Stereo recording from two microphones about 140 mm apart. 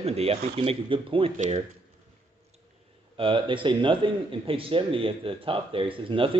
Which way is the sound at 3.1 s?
40° right (ahead or behind).